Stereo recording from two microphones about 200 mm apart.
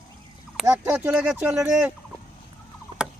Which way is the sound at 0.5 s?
5° right (ahead or behind).